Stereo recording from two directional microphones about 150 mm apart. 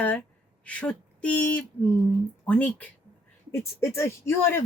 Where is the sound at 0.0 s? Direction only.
10° left (ahead or behind).